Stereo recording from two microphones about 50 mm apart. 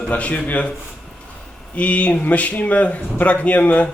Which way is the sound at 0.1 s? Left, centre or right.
Left.